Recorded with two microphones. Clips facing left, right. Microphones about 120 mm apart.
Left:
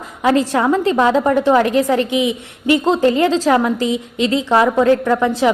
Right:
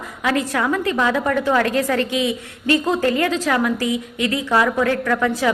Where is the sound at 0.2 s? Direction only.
30° left (ahead or behind).